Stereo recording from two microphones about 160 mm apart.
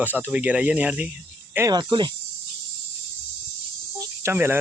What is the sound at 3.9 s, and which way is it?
Cricket, 20° right (ahead or behind).